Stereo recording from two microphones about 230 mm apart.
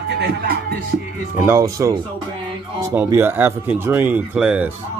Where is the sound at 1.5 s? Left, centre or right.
Centre.